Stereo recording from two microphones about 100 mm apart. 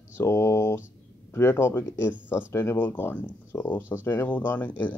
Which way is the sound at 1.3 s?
25° left (ahead or behind).